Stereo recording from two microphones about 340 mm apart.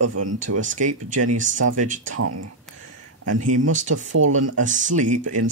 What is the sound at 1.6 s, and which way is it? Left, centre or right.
Speech, right.